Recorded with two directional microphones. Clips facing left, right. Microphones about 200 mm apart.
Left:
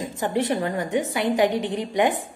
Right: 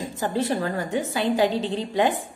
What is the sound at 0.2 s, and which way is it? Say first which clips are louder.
A woman's voice: left 1 dB; 20° left (ahead or behind).